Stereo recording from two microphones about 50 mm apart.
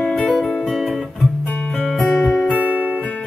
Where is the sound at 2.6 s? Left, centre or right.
Right.